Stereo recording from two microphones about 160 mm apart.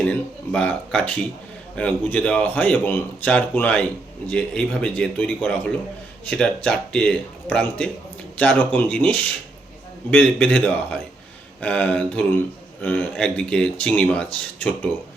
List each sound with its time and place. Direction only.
0.0 s speech: 5° left (ahead or behind)